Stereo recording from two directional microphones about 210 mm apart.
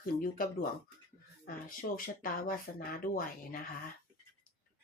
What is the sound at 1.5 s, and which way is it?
Speech, 40° left (ahead or behind).